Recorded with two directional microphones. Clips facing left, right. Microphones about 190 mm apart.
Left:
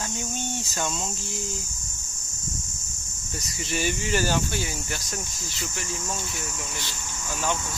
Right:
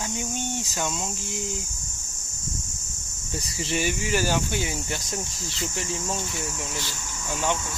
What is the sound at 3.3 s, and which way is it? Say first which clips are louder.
Speech: right 3 dB; 30° right (ahead or behind).